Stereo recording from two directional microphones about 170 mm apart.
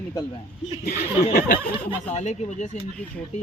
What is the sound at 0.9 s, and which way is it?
Speech, 60° left (ahead or behind).